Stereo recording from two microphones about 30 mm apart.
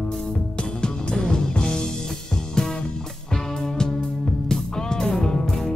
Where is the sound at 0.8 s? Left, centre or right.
Left.